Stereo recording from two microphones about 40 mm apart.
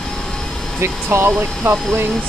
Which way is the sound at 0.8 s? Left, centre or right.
Right.